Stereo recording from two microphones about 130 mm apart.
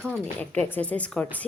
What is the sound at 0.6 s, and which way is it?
Speech, 10° left (ahead or behind).